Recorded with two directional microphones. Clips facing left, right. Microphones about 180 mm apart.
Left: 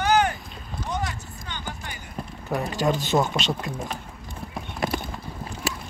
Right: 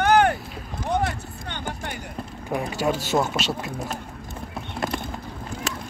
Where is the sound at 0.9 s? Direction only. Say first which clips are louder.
Right 6 dB; 60° right (ahead or behind).